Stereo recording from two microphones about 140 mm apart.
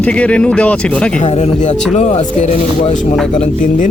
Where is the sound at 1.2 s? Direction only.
55° left (ahead or behind).